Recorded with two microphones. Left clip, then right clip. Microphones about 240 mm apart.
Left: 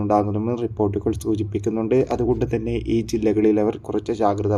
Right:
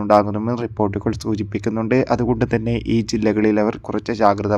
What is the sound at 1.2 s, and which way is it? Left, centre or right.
A man's voice, right.